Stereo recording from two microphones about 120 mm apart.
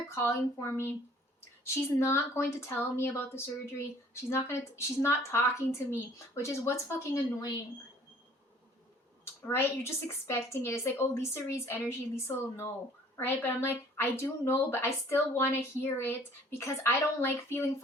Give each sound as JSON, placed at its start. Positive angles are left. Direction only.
{"t": 0.1, "sound": "a woman's voice", "side_deg": 25}
{"t": 9.5, "sound": "a woman's voice", "side_deg": 20}